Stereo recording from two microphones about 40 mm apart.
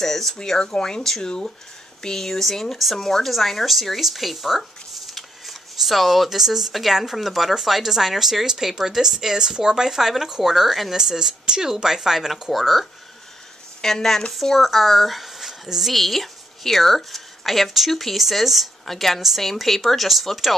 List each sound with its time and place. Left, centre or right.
0.0 s a sound: centre
0.4 s speech: centre
13.7 s a woman's voice: centre